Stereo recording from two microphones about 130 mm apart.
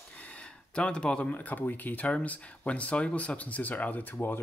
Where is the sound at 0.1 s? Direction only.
10° left (ahead or behind).